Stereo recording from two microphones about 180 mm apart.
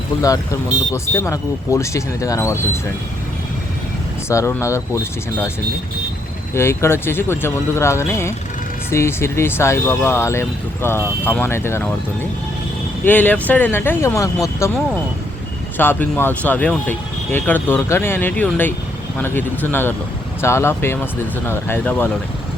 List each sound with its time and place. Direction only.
0.9 s speech: 15° left (ahead or behind)
4.3 s speech: 15° left (ahead or behind)
6.5 s speech: 15° left (ahead or behind)
13.1 s speech: 10° left (ahead or behind)
15.8 s speech: 10° left (ahead or behind)